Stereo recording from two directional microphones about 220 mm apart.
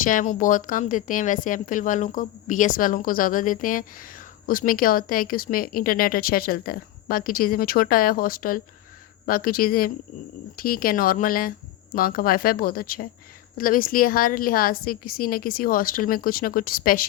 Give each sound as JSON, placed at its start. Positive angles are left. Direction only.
{"t": 0.0, "sound": "speech", "side_deg": 35}